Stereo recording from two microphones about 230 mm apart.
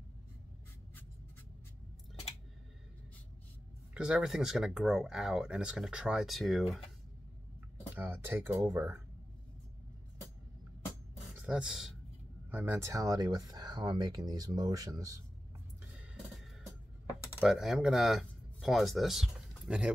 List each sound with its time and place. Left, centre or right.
3.9 s speech: centre
7.9 s speech: centre
10.9 s beatboxing: centre
12.4 s speech: centre
17.4 s speech: centre